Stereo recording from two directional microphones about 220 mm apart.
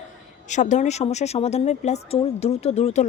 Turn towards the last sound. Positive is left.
turn(degrees=30)  # may be behind; listen again after turning